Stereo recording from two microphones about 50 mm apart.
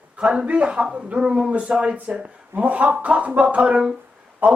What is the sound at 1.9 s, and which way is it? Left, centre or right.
A man's voice, right.